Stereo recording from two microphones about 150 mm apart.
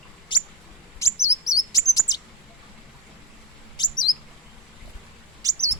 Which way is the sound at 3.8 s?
30° left (ahead or behind).